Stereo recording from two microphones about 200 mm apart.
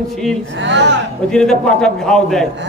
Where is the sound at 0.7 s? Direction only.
60° right (ahead or behind).